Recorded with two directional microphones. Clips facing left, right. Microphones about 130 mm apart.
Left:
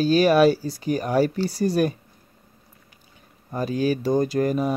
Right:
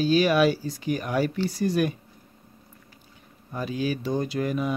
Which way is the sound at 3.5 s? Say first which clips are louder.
Left 5 dB; 45° left (ahead or behind).